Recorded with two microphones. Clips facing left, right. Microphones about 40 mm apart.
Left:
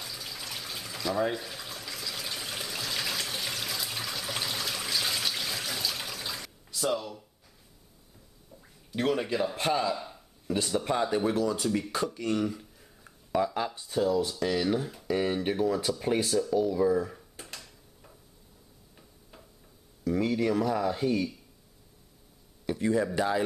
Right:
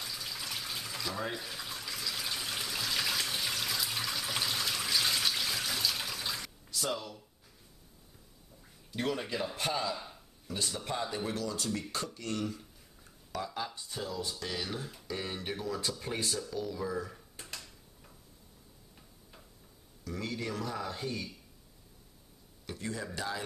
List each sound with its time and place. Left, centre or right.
0.0 s bathtub: centre
8.9 s speech: centre
16.3 s drawer open or close: centre
19.3 s a sound: centre
20.1 s speech: centre
22.7 s speech: centre